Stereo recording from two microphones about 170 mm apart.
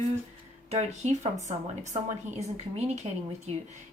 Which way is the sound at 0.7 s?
40° right (ahead or behind).